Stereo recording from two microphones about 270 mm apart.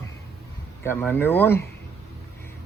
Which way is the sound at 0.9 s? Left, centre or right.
Centre.